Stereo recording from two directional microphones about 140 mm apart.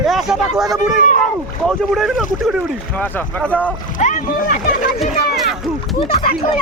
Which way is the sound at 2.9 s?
10° left (ahead or behind).